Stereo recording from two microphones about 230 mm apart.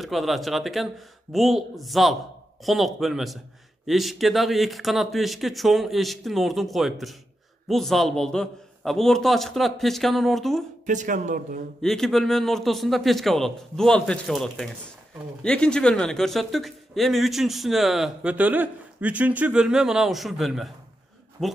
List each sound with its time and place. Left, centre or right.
0.0 s speech: centre
10.9 s speech: right
11.8 s speech: centre